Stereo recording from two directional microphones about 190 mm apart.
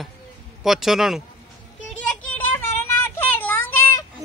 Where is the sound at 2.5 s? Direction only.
10° left (ahead or behind).